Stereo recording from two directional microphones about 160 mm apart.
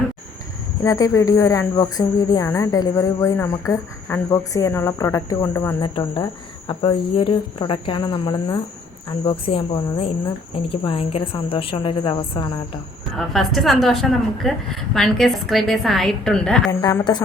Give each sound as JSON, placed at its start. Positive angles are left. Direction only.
{"t": 0.9, "sound": "speech", "side_deg": 20}
{"t": 5.8, "sound": "a woman's voice", "side_deg": 30}
{"t": 13.1, "sound": "a woman's voice", "side_deg": 0}
{"t": 16.8, "sound": "speech", "side_deg": 25}